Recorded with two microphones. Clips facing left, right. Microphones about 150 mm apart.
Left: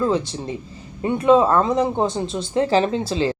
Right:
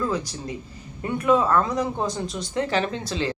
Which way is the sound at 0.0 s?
25° left (ahead or behind).